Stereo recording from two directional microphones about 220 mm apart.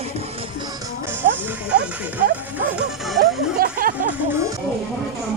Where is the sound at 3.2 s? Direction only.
40° right (ahead or behind).